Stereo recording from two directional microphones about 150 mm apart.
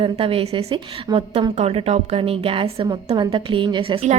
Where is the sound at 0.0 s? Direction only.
40° right (ahead or behind).